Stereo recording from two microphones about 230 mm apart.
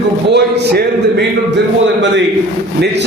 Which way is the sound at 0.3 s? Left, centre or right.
Right.